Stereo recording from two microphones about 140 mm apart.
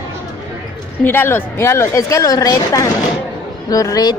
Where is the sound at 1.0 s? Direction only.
15° left (ahead or behind).